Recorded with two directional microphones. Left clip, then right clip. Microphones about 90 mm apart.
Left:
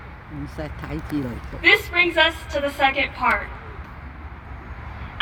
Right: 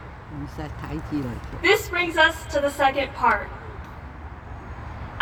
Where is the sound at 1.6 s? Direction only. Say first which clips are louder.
Left 4 dB; 30° right (ahead or behind).